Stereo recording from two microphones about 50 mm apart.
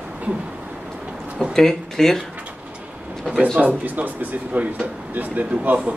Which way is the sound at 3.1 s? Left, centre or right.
Centre.